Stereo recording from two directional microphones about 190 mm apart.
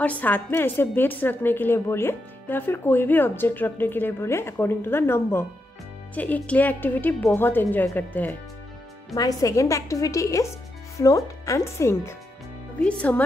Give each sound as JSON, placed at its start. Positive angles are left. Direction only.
{"t": 0.0, "sound": "a woman's voice", "side_deg": 10}